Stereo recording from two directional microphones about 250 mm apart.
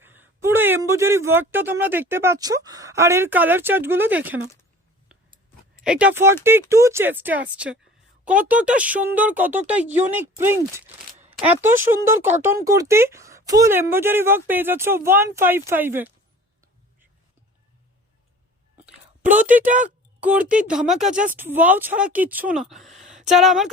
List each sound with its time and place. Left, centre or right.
0.0 s speech: centre
5.8 s speech: centre
19.6 s speech: right
20.5 s speech: centre